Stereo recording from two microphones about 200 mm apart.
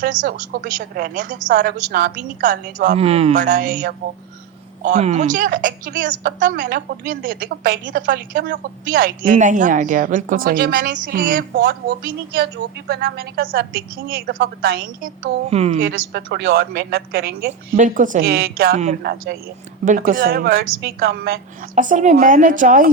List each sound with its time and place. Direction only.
0.0 s a woman's voice: 40° right (ahead or behind)
15.4 s a woman's voice: 30° right (ahead or behind)
15.8 s a woman's voice: 50° right (ahead or behind)